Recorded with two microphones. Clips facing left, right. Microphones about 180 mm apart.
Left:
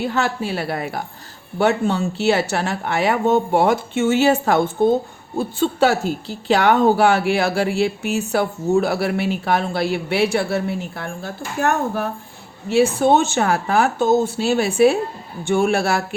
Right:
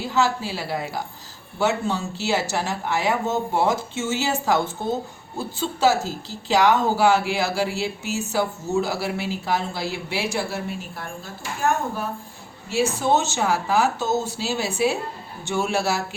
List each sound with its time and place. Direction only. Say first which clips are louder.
0.0 s speech: left 1 dB; 60° left (ahead or behind)